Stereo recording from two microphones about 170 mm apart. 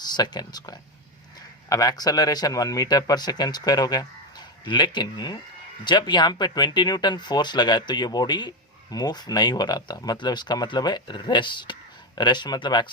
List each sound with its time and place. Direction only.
0.2 s speech: 25° left (ahead or behind)